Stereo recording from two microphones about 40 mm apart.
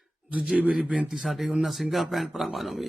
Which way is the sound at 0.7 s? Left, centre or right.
Right.